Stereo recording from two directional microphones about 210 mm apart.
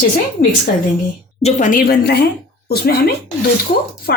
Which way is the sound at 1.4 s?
40° left (ahead or behind).